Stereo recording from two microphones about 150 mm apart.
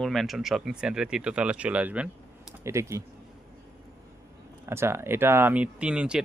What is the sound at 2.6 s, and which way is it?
Speech, 20° right (ahead or behind).